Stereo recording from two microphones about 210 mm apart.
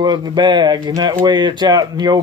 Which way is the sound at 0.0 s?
20° right (ahead or behind).